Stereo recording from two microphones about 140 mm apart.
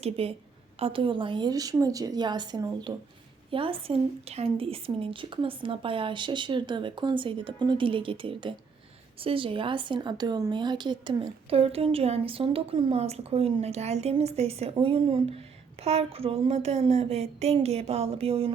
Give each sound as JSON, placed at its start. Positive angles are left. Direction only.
{"t": 0.0, "sound": "a woman's voice", "side_deg": -45}